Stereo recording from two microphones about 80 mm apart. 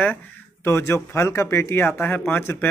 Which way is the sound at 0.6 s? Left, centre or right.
Left.